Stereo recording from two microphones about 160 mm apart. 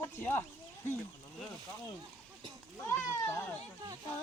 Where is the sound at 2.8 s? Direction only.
15° left (ahead or behind).